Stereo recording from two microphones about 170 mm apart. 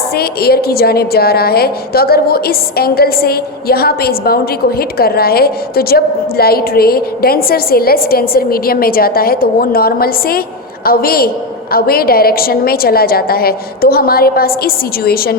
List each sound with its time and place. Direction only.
0.2 s a woman's voice: 65° left (ahead or behind)